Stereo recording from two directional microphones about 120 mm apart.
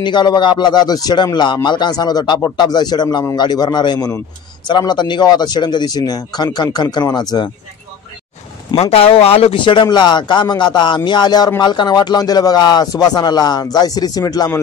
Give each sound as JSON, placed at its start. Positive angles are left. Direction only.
{"t": 0.0, "sound": "speech", "side_deg": 40}
{"t": 8.9, "sound": "speech", "side_deg": 55}